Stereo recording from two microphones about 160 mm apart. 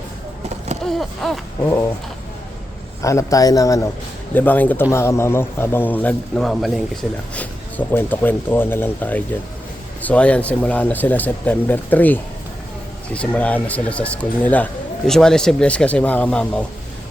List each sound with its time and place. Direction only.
0.9 s a sound: centre (ahead or behind)
3.0 s a man's voice: 20° left (ahead or behind)
4.4 s a man's voice: 10° left (ahead or behind)